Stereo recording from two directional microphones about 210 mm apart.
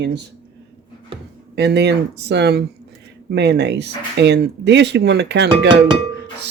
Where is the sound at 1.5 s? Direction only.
55° right (ahead or behind).